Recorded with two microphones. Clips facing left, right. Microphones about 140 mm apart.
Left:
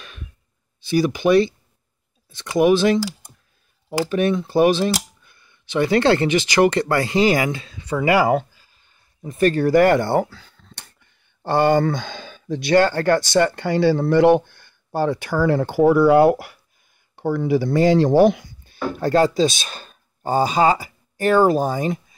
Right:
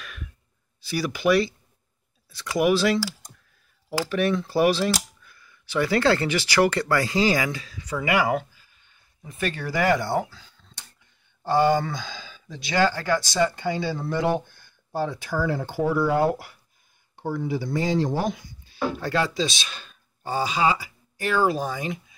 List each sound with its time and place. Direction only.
0.7 s speech: 25° left (ahead or behind)
2.5 s speech: 20° left (ahead or behind)
4.0 s speech: 20° left (ahead or behind); by 22.0 s 40° left (ahead or behind)